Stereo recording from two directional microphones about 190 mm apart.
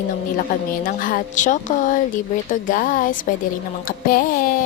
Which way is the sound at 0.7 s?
50° left (ahead or behind).